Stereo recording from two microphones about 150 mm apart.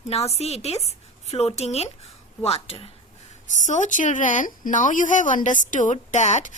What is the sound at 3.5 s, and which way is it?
A woman's voice, 55° left (ahead or behind).